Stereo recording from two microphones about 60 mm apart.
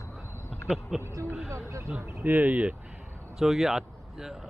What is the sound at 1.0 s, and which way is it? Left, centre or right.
Speech, right.